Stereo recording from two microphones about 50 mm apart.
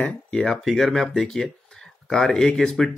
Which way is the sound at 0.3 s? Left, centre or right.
Centre.